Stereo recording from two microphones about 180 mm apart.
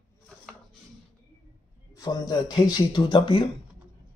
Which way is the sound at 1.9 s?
20° left (ahead or behind).